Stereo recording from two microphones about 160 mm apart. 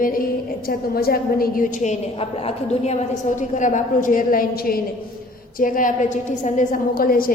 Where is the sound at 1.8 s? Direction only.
40° left (ahead or behind).